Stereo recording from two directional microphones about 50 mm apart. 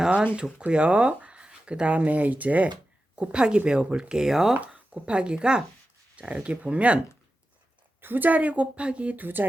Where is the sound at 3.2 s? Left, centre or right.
Right.